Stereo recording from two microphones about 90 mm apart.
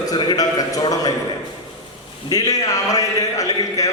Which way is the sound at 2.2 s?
45° left (ahead or behind).